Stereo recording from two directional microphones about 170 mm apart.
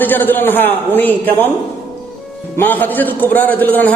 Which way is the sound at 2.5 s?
10° left (ahead or behind).